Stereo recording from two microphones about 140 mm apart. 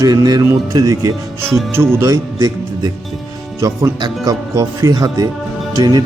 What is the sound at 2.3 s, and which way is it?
Speech, 30° right (ahead or behind).